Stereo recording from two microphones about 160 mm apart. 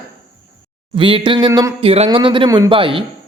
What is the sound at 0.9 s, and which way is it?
Speech, 30° right (ahead or behind).